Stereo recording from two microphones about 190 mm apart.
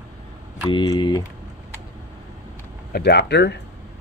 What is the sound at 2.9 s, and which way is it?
Speech, 60° left (ahead or behind).